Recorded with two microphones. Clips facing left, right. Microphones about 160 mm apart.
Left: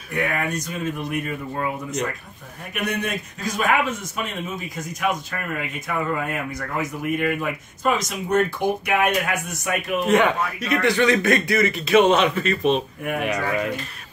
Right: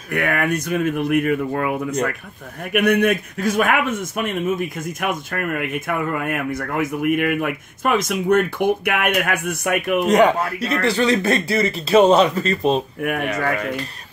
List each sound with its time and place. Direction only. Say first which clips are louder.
0.1 s a man's voice: right 4 dB; 65° right (ahead or behind)
10.0 s speech: right 3 dB; 40° right (ahead or behind)